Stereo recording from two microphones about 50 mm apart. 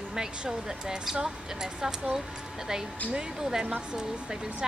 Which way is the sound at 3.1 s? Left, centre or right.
Centre.